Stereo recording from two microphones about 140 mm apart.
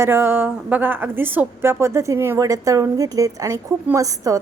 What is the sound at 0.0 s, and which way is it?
A woman's voice, 15° right (ahead or behind).